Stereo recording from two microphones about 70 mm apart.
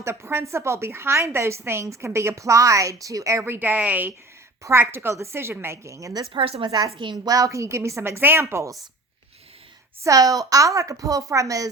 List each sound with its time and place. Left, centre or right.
0.0 s a woman's voice: right
3.4 s a woman's voice: right
4.6 s a woman's voice: right
10.0 s a woman's voice: right